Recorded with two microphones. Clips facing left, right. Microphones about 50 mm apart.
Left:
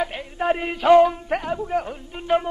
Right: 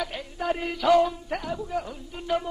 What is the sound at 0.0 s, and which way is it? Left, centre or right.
Speech, left.